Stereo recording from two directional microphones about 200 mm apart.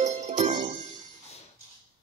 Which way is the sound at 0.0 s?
35° right (ahead or behind).